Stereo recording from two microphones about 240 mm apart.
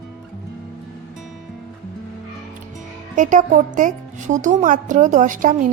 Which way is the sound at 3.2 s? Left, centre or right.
Right.